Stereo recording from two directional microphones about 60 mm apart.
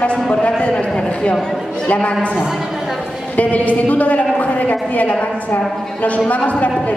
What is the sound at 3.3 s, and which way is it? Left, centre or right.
A man's voice, left.